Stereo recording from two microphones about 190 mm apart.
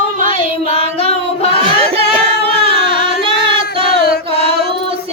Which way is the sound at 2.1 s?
30° right (ahead or behind).